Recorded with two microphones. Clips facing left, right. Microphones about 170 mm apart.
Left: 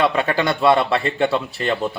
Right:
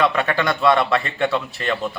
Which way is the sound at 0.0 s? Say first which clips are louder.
Left 1 dB; 30° left (ahead or behind).